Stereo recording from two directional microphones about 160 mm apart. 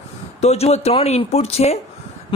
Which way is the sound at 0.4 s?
40° left (ahead or behind).